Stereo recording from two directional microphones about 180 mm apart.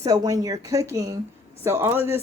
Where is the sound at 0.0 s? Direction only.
20° right (ahead or behind).